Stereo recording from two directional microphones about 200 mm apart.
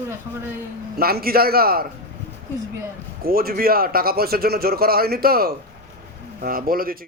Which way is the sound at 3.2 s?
45° right (ahead or behind).